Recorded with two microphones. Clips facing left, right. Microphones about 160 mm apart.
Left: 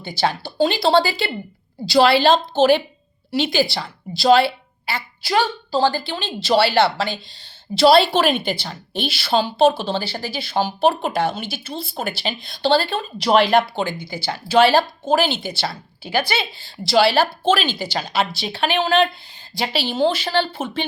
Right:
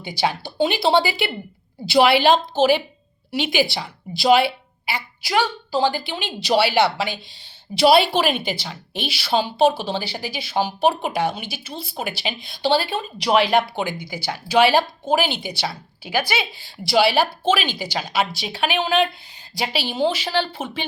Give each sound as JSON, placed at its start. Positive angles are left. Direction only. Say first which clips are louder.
{"t": 0.0, "sound": "speech", "louder": "left 1 dB", "side_deg": -15}